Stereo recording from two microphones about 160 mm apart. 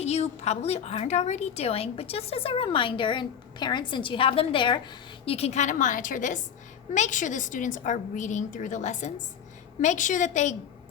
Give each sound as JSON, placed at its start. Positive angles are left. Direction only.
{"t": 0.0, "sound": "a woman's voice", "side_deg": 40}